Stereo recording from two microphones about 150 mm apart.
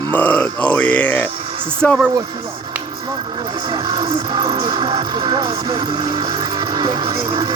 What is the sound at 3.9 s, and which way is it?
Speech, 30° right (ahead or behind).